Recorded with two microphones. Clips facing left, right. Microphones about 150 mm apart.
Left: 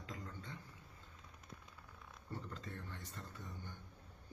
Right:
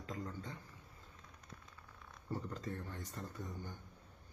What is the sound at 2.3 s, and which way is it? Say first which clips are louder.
Speech: right 6 dB; 40° right (ahead or behind).